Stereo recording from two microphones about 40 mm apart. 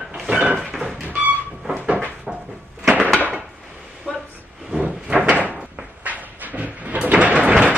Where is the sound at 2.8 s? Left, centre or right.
Right.